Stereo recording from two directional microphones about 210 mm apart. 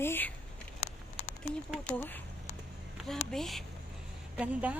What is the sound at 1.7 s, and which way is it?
A woman's voice, 5° left (ahead or behind).